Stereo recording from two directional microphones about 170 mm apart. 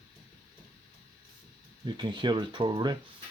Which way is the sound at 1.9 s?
25° right (ahead or behind).